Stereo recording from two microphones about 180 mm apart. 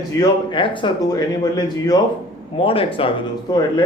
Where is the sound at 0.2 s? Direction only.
25° left (ahead or behind).